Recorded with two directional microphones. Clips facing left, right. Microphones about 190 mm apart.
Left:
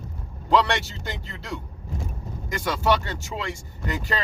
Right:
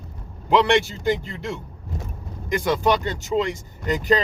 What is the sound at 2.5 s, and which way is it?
A man's voice, 20° right (ahead or behind).